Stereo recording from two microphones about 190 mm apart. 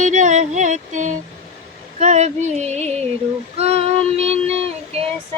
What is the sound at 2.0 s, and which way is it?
Female singing, 35° right (ahead or behind).